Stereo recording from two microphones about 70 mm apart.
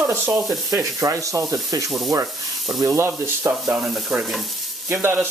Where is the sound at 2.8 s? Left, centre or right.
Right.